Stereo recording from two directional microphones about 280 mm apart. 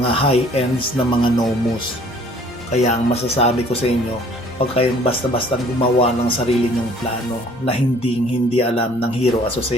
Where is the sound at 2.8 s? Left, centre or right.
Left.